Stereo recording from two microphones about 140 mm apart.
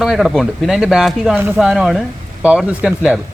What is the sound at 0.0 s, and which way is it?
Speech, 5° right (ahead or behind).